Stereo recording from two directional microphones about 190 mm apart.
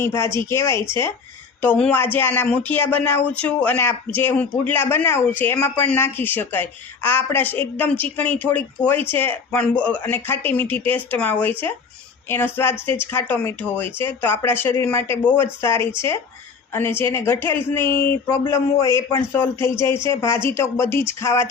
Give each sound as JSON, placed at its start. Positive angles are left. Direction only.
{"t": 0.0, "sound": "speech", "side_deg": 15}
{"t": 16.7, "sound": "speech", "side_deg": 10}